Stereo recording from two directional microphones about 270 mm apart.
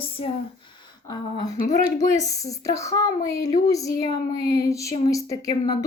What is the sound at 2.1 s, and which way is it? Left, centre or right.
A woman's voice, centre.